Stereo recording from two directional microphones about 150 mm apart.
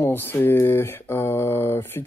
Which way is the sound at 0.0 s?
15° left (ahead or behind).